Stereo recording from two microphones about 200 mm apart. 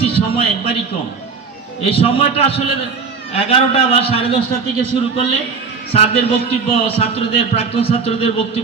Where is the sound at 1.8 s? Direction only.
30° left (ahead or behind).